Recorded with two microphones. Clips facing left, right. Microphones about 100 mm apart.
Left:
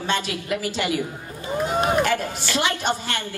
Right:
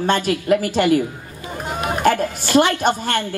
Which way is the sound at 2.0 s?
45° right (ahead or behind).